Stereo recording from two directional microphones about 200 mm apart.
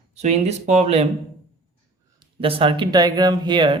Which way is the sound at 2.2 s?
25° right (ahead or behind).